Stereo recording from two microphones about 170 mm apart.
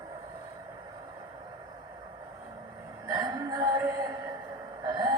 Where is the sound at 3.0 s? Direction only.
25° right (ahead or behind).